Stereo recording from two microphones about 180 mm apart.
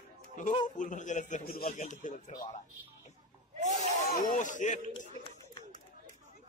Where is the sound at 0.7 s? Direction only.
45° left (ahead or behind).